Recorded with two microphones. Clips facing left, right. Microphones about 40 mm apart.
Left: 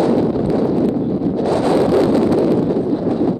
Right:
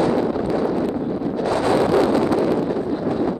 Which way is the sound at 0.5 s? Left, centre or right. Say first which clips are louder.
Left 5 dB; right.